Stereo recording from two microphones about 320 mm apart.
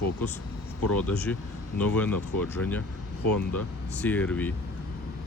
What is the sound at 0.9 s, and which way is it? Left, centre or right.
Speech, centre.